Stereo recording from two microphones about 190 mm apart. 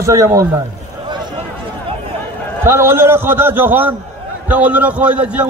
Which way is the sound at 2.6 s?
15° right (ahead or behind).